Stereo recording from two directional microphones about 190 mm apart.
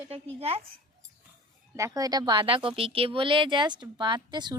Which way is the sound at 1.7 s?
15° right (ahead or behind).